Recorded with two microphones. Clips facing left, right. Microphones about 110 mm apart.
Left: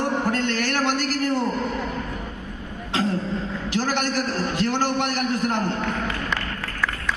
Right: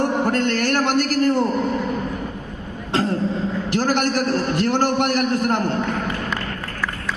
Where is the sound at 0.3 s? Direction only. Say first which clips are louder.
Right 4 dB; 50° right (ahead or behind).